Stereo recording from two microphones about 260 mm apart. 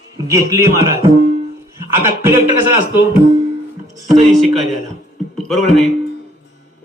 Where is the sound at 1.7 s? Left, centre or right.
Centre.